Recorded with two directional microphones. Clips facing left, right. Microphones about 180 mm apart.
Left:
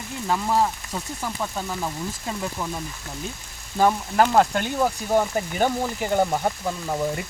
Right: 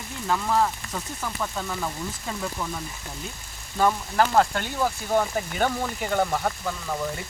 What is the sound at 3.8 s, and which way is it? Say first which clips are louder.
Speech: left 3 dB; 20° left (ahead or behind).